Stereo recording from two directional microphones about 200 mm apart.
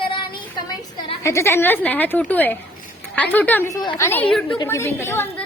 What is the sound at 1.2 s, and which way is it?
Speech, 15° left (ahead or behind).